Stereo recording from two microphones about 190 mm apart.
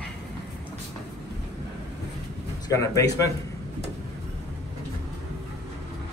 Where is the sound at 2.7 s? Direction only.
15° left (ahead or behind).